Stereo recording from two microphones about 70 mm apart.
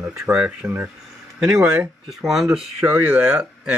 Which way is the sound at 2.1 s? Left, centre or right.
Centre.